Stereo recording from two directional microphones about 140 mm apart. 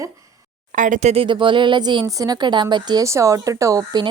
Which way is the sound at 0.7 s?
65° right (ahead or behind).